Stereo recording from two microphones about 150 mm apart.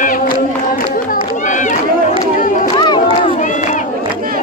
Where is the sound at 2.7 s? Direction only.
30° left (ahead or behind).